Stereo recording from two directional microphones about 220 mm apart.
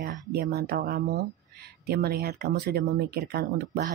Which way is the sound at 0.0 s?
45° right (ahead or behind).